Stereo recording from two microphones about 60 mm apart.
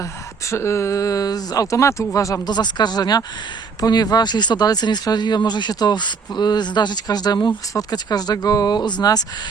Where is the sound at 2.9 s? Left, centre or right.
Left.